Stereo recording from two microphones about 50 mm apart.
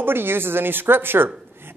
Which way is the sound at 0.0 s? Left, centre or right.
Right.